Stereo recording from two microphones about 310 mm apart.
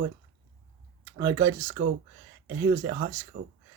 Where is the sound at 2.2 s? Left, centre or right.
Right.